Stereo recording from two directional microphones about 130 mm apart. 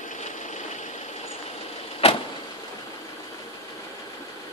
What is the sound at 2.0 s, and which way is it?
Vehicle, 50° left (ahead or behind).